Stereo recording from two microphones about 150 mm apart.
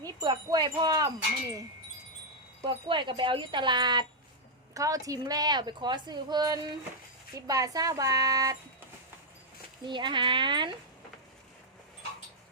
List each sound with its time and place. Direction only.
0.0 s a woman's voice: 25° right (ahead or behind)
2.6 s a woman's voice: 35° right (ahead or behind)
9.8 s speech: 30° right (ahead or behind)